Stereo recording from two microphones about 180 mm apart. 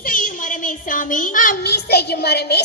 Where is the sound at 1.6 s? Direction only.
65° left (ahead or behind).